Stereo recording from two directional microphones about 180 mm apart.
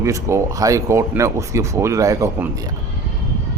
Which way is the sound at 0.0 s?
15° right (ahead or behind).